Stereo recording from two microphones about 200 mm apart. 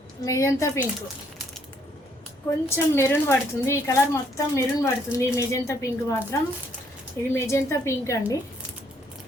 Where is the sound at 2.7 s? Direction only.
15° left (ahead or behind).